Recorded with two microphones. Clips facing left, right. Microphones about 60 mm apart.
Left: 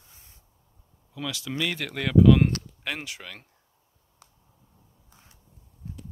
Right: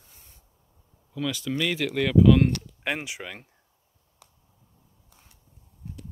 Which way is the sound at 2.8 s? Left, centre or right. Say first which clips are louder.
Right 5 dB; centre.